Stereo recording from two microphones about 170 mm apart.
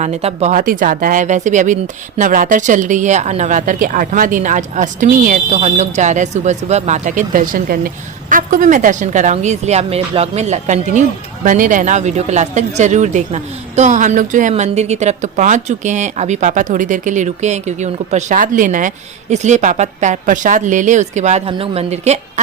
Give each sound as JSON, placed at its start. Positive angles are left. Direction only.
{"t": 0.0, "sound": "speech", "side_deg": -40}